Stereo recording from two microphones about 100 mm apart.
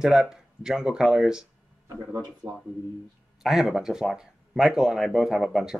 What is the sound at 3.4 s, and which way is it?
Speech, 5° right (ahead or behind).